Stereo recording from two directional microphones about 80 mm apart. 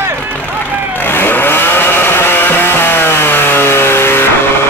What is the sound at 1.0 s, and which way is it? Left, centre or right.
Vehicle, left.